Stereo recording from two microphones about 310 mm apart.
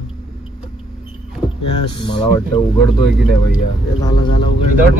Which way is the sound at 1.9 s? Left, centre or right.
Centre.